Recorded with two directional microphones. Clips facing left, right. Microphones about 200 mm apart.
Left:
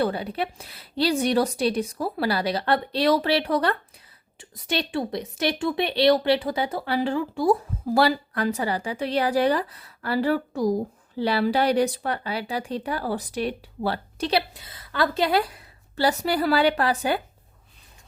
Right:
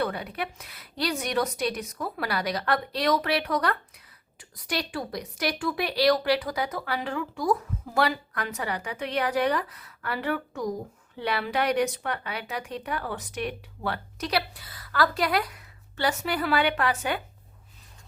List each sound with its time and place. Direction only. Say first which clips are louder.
0.0 s a woman's voice: left 5 dB; 30° left (ahead or behind)